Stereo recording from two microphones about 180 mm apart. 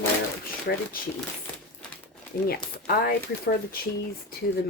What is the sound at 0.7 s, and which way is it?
Speech, 65° left (ahead or behind).